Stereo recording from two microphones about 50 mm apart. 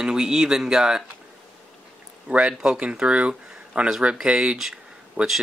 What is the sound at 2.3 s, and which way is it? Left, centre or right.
Speech, right.